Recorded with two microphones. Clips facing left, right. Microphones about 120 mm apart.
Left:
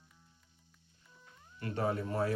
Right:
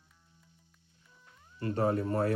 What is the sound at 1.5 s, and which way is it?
Speech, 35° right (ahead or behind).